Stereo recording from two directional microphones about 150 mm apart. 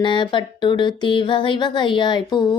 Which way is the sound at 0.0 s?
30° left (ahead or behind).